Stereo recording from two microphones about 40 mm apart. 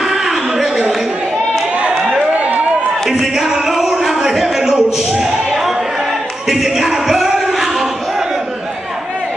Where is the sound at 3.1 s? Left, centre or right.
Centre.